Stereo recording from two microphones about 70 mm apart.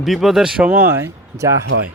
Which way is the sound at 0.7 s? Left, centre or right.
Right.